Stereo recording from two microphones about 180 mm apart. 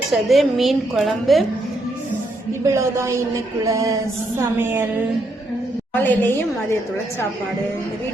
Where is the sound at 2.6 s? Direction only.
15° right (ahead or behind).